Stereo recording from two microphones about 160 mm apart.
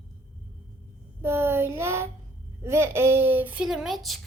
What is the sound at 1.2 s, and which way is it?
A child's voice, 15° right (ahead or behind).